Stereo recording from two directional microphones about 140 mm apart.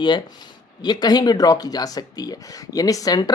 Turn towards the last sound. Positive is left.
turn(degrees=25)  # may be behind; listen again after turning